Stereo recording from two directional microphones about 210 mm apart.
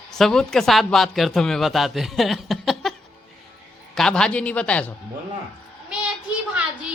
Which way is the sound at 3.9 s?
5° left (ahead or behind).